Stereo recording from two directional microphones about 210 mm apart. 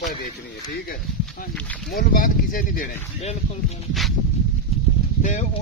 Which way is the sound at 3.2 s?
30° left (ahead or behind).